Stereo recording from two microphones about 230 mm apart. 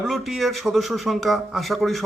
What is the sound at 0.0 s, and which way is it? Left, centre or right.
A man's voice, centre.